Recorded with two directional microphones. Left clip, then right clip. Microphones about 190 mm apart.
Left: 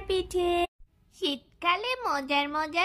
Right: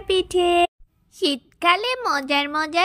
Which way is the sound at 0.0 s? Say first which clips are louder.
Right 8 dB; 25° right (ahead or behind).